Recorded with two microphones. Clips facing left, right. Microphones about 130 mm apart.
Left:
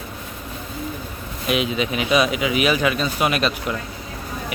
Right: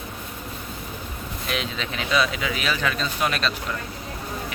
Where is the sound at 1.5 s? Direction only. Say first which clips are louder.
Left 8 dB; 10° left (ahead or behind).